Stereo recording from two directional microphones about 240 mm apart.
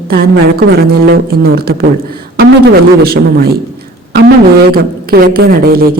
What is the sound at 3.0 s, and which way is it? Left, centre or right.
A woman's voice, right.